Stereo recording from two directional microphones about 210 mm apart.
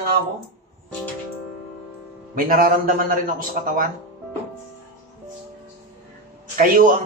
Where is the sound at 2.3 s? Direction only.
45° right (ahead or behind).